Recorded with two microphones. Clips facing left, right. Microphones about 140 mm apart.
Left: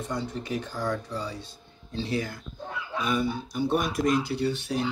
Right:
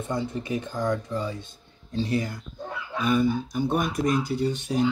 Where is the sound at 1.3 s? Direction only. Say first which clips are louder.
Right 2 dB; 45° right (ahead or behind).